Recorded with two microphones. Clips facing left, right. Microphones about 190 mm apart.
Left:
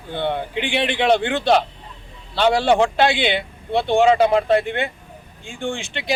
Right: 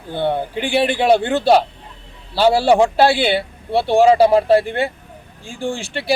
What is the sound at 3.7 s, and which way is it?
Speech, 5° right (ahead or behind).